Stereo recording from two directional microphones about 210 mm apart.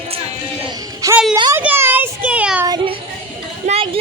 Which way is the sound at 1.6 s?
10° right (ahead or behind).